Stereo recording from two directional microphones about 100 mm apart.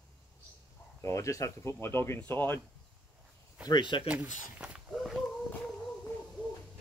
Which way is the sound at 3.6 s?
50° left (ahead or behind).